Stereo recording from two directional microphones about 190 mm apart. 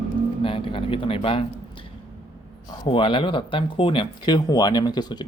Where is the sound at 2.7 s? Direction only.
25° left (ahead or behind).